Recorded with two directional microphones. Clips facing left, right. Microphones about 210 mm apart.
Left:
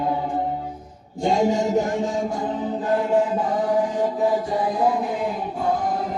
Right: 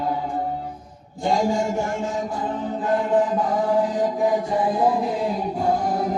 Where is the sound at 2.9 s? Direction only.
10° left (ahead or behind).